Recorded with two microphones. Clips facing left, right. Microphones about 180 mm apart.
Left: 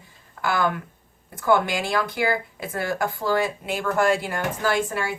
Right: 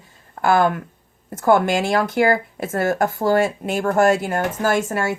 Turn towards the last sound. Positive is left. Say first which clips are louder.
# right 4 dB
turn(degrees=-45)  # may be behind; listen again after turning